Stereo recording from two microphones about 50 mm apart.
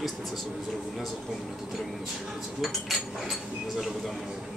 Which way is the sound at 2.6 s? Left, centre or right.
Centre.